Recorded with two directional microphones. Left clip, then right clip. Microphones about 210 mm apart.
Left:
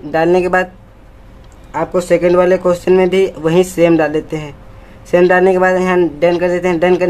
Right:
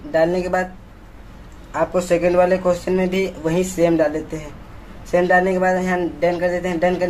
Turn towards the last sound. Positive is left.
turn(degrees=45)  # may be behind; listen again after turning